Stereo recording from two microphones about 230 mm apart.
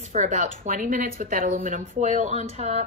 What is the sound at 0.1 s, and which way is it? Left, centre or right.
A woman's voice, right.